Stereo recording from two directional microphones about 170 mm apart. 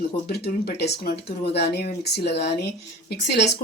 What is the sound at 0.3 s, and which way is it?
Speech, 70° left (ahead or behind).